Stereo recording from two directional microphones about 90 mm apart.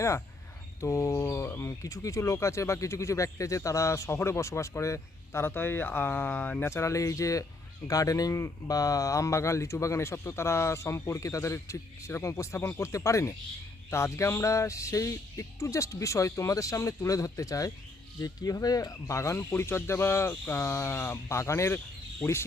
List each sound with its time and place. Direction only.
0.8 s speech: 35° left (ahead or behind)